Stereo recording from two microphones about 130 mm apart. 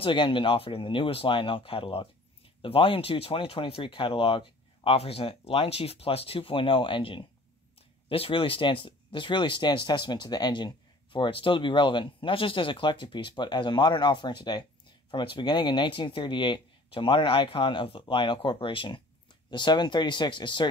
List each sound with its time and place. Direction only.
0.0 s speech: 40° left (ahead or behind)